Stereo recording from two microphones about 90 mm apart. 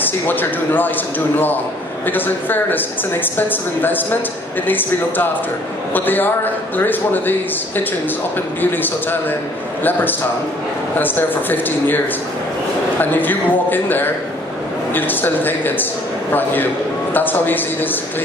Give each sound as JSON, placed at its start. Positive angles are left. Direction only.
{"t": 0.0, "sound": "speech", "side_deg": 20}
{"t": 11.0, "sound": "speech", "side_deg": 20}
{"t": 13.0, "sound": "speech", "side_deg": 20}